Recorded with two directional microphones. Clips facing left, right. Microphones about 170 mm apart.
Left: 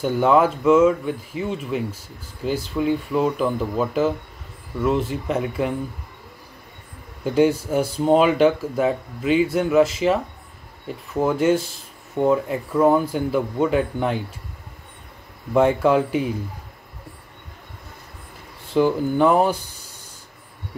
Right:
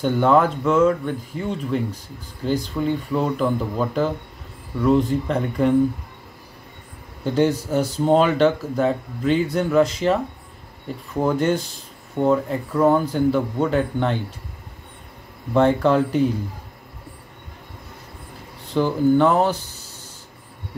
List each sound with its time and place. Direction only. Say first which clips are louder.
0.0 s speech: even; 5° left (ahead or behind)
7.7 s speech: even; 10° left (ahead or behind)
11.1 s speech: left 1 dB; 5° left (ahead or behind)
15.5 s speech: even; 10° left (ahead or behind)
18.7 s speech: right 1 dB; 10° left (ahead or behind)